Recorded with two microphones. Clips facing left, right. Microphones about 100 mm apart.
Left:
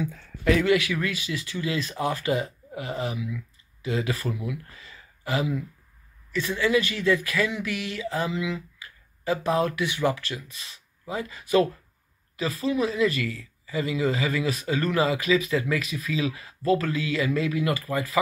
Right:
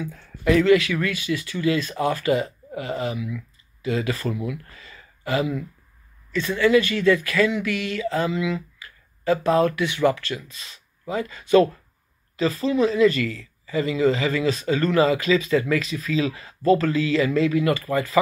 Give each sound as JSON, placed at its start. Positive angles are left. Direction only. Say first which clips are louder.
{"t": 0.1, "sound": "speech", "louder": "right 6 dB", "side_deg": -5}
{"t": 0.7, "sound": "speech", "louder": "right 5 dB", "side_deg": 15}